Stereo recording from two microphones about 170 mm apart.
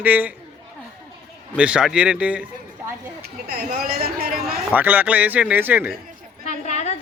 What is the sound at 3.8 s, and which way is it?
Speech, 65° right (ahead or behind).